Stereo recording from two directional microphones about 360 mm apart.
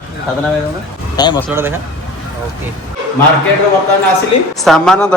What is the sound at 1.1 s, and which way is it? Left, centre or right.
Speech, centre.